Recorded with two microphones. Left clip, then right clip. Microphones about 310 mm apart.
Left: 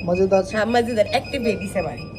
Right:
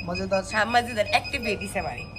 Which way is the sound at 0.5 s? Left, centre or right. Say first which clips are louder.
Left 4 dB; centre.